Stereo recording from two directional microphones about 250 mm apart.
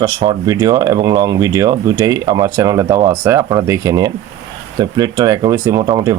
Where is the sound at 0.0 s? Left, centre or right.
Centre.